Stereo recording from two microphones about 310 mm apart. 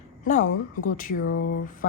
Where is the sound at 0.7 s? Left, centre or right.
Left.